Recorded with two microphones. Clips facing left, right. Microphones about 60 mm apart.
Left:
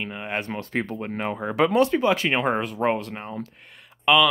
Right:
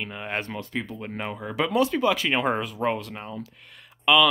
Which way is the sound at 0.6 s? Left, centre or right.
Left.